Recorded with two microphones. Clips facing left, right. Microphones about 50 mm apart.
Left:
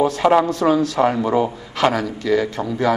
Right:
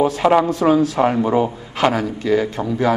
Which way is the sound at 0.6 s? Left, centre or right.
Right.